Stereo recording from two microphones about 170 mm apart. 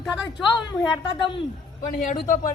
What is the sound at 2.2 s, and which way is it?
Speech, 50° left (ahead or behind).